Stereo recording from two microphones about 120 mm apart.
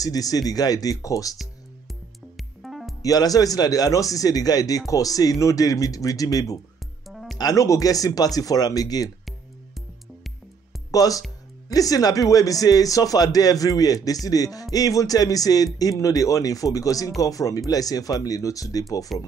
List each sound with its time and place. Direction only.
0.0 s speech: 30° left (ahead or behind)
2.3 s music: centre (ahead or behind)
3.0 s speech: 30° left (ahead or behind)
7.1 s music: centre (ahead or behind)
7.3 s speech: 30° left (ahead or behind)
10.9 s speech: 30° left (ahead or behind)